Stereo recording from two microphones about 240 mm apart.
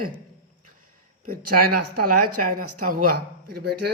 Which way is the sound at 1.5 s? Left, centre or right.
Right.